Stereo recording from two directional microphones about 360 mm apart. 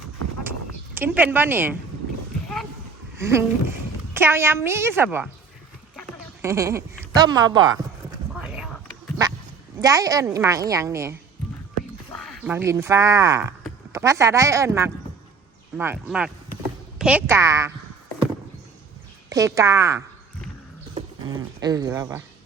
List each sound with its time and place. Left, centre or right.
0.9 s speech: centre
3.2 s a woman's voice: centre
8.4 s a sound: centre
9.8 s a woman's voice: centre
19.3 s a woman's voice: centre
21.6 s a woman's voice: centre